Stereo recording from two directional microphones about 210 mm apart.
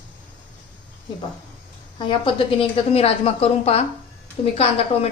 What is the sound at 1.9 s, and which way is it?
A woman's voice, 25° left (ahead or behind).